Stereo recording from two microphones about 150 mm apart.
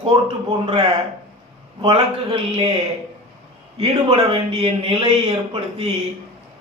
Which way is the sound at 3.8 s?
40° right (ahead or behind).